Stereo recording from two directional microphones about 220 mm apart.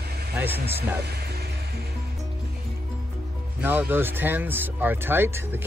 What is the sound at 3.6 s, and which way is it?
Speech, 10° right (ahead or behind).